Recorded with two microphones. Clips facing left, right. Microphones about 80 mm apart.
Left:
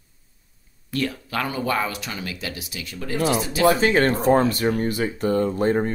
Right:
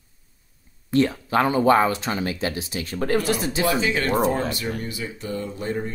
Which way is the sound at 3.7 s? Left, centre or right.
Left.